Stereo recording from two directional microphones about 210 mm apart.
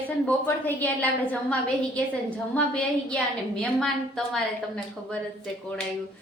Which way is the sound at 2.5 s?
5° left (ahead or behind).